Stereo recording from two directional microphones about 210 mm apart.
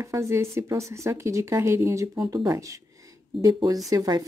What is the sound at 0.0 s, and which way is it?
Speech, 15° right (ahead or behind).